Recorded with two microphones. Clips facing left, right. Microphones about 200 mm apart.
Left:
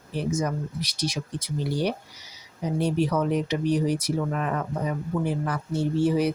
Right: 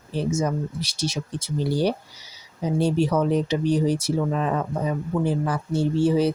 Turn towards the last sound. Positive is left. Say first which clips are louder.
# right 3 dB
turn(degrees=-30)  # may be behind; listen again after turning